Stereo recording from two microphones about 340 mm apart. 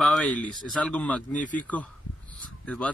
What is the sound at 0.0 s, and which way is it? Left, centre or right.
Speech, centre.